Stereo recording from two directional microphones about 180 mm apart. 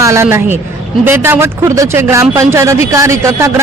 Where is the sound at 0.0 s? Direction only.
15° right (ahead or behind).